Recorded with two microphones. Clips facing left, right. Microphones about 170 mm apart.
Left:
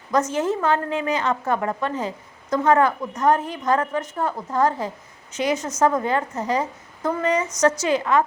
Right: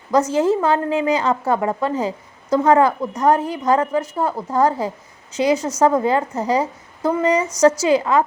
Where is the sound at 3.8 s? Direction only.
10° right (ahead or behind).